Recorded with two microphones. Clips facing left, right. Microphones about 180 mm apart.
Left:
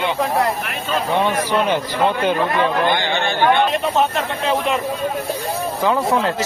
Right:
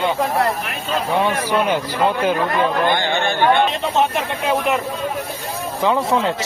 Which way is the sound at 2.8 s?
50° right (ahead or behind).